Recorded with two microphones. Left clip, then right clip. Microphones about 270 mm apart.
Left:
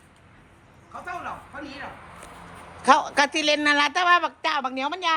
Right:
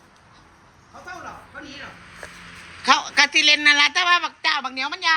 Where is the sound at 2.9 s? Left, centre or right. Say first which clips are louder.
Right 2 dB; centre.